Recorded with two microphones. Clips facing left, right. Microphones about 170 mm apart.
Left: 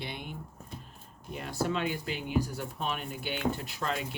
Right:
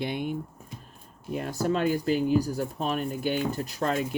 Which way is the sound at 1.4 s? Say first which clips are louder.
Right 5 dB; 45° right (ahead or behind).